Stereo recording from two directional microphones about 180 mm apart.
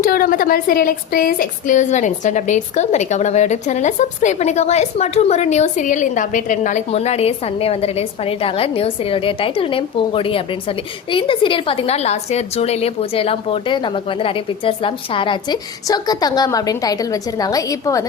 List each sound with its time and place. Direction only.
0.0 s a woman's voice: 50° left (ahead or behind); by 18.0 s 20° left (ahead or behind)